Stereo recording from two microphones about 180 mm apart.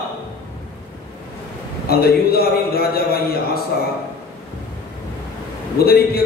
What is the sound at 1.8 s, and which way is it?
A man's voice, 60° left (ahead or behind).